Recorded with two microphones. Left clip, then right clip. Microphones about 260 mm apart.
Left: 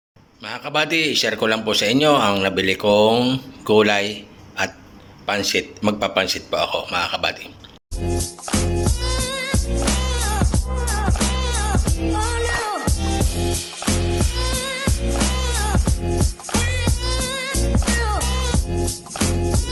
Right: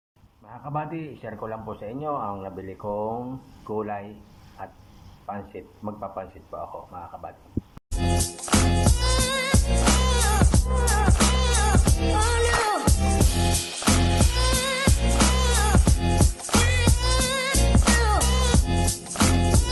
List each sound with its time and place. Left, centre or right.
0.4 s a man's voice: left
5.5 s a man's voice: left
8.0 s music: centre